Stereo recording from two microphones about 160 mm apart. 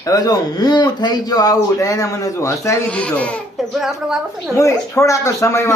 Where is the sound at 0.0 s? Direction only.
20° left (ahead or behind).